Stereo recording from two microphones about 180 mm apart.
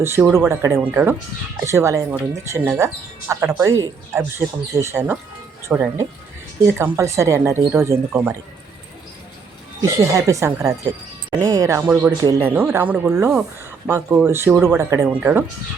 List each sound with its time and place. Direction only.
0.0 s speech: 15° right (ahead or behind)
9.8 s speech: 15° right (ahead or behind)